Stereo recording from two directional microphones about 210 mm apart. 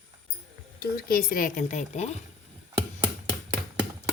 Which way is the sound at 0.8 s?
45° left (ahead or behind).